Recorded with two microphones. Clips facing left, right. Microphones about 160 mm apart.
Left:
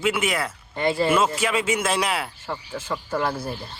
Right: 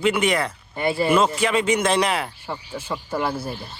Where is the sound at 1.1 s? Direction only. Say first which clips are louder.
Right 3 dB; 5° left (ahead or behind).